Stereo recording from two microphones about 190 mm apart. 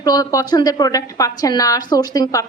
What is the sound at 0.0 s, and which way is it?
A woman's voice, 20° left (ahead or behind).